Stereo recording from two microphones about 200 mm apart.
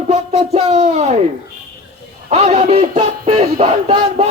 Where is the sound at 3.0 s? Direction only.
25° right (ahead or behind).